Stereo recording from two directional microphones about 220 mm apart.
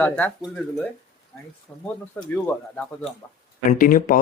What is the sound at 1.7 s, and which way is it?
Speech, 10° left (ahead or behind).